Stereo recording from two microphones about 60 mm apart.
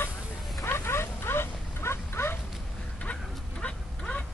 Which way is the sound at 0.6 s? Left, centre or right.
Left.